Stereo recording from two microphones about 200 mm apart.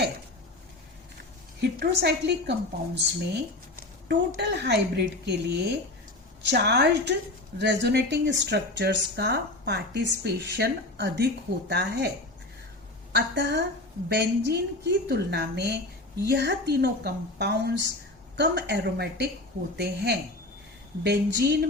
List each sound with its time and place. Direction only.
1.7 s a woman's voice: 50° right (ahead or behind)
13.1 s a woman's voice: 60° right (ahead or behind)